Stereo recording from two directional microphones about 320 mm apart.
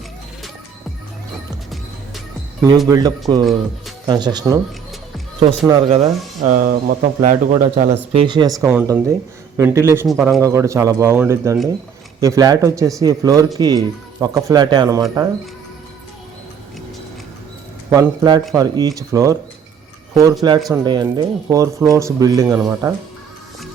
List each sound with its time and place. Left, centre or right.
1.7 s music: centre
2.7 s speech: centre
17.9 s speech: centre
20.7 s speech: centre